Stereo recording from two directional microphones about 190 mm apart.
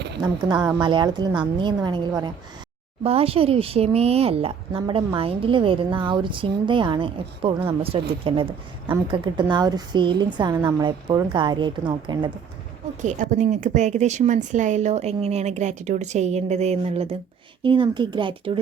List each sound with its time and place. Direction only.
0.2 s a woman's voice: 20° right (ahead or behind)
3.0 s a woman's voice: 30° right (ahead or behind)
13.0 s a woman's voice: 40° right (ahead or behind)